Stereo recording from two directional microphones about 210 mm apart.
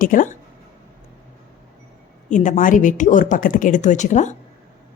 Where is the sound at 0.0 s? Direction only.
40° left (ahead or behind).